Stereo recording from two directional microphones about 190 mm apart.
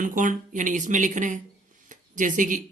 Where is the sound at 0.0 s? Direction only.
45° right (ahead or behind).